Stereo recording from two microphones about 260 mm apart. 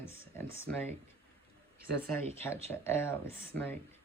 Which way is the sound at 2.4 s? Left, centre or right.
Centre.